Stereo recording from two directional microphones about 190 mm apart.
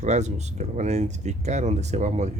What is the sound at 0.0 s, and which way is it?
Speech, 35° right (ahead or behind).